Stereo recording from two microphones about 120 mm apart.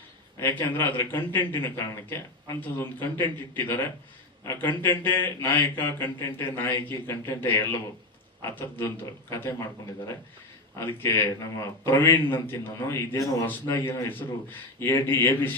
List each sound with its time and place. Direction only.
0.3 s a man's voice: 20° left (ahead or behind)
10.8 s a man's voice: 20° left (ahead or behind)